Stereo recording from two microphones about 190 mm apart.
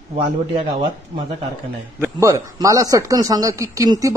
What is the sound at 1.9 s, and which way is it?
A man's voice, 15° right (ahead or behind).